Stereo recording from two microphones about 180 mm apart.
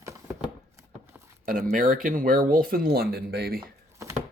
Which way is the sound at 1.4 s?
50° right (ahead or behind).